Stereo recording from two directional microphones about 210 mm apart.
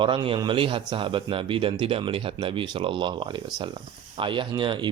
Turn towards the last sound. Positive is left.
turn(degrees=-25)  # may be behind; listen again after turning